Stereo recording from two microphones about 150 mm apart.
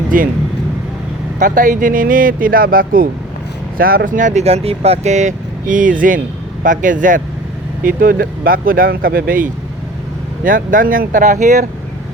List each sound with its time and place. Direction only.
0.1 s speech: 65° right (ahead or behind)
1.4 s speech: 60° right (ahead or behind)